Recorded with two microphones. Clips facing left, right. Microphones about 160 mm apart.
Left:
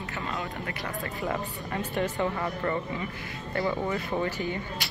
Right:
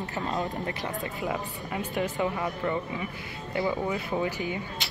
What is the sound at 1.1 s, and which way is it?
A woman's voice, 10° right (ahead or behind).